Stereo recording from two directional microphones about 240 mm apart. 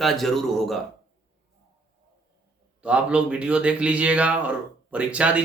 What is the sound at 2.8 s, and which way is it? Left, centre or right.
Speech, centre.